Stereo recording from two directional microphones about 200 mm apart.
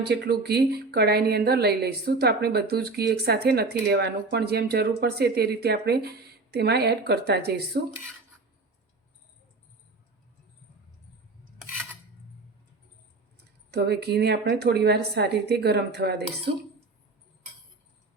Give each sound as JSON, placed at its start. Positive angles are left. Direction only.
{"t": 0.0, "sound": "speech", "side_deg": -55}
{"t": 13.7, "sound": "a woman's voice", "side_deg": -55}